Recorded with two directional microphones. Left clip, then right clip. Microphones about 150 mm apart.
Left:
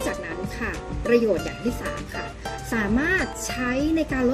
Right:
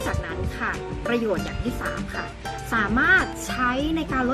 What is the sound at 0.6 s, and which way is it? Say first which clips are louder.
Speech: right 3 dB; centre (ahead or behind).